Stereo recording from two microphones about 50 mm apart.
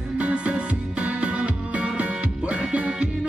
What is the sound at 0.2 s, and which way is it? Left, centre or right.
Music, right.